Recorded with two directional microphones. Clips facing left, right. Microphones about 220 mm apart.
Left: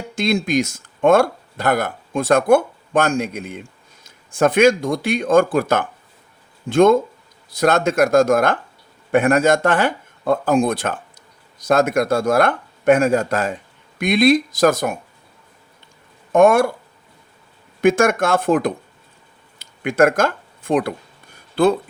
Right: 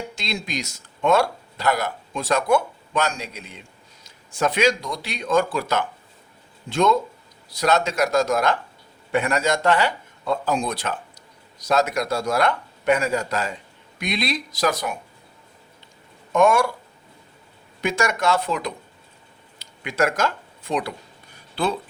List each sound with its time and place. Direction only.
0.2 s speech: 50° left (ahead or behind)
16.3 s speech: 50° left (ahead or behind)
17.7 s speech: 50° left (ahead or behind)
19.5 s a sound: 50° left (ahead or behind)
21.5 s speech: 50° left (ahead or behind)